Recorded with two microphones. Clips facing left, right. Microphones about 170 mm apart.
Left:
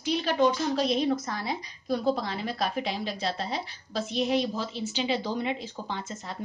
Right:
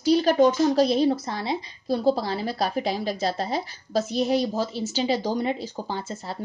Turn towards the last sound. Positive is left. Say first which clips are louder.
# right 4 dB
turn(degrees=-35)  # may be behind; listen again after turning